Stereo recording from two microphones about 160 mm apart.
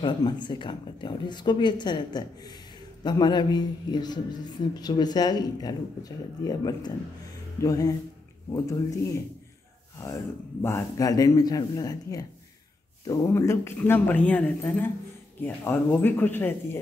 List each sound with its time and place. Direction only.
0.0 s a woman's voice: 30° left (ahead or behind)
10.6 s a woman's voice: 15° left (ahead or behind)